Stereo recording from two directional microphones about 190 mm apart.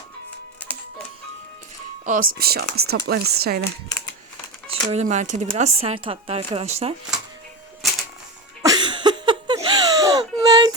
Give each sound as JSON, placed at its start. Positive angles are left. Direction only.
{"t": 2.0, "sound": "speech", "side_deg": -45}
{"t": 3.8, "sound": "speech", "side_deg": 20}
{"t": 4.7, "sound": "speech", "side_deg": -35}
{"t": 8.6, "sound": "a sound", "side_deg": -20}